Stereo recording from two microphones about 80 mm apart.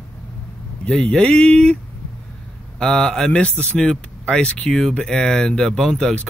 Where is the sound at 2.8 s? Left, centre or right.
Centre.